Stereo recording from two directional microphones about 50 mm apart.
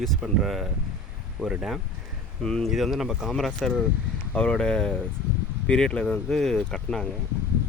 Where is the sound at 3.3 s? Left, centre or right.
Centre.